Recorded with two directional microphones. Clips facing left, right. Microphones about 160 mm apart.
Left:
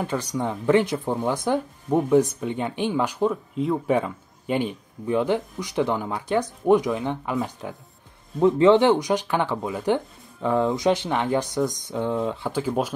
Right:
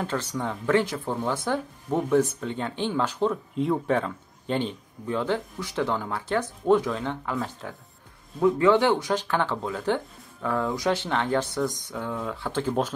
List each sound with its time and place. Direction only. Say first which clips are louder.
0.0 s speech: left 3 dB; 15° left (ahead or behind)
3.8 s speech: left 3 dB; 10° left (ahead or behind)